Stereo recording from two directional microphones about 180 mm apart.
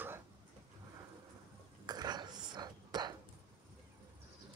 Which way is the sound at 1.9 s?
25° right (ahead or behind).